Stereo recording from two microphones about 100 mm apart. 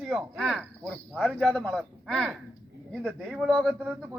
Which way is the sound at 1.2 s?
15° left (ahead or behind).